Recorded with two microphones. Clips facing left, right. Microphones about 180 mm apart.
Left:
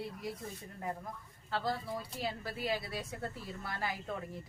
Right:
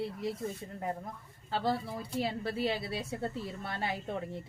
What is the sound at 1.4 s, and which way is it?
A woman's voice, 30° right (ahead or behind).